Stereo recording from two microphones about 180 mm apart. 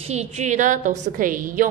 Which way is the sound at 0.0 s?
35° right (ahead or behind).